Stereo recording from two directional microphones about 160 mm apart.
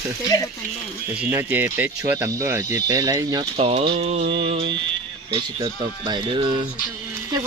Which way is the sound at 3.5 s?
35° right (ahead or behind).